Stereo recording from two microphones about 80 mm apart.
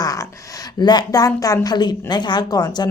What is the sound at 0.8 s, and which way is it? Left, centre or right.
Speech, left.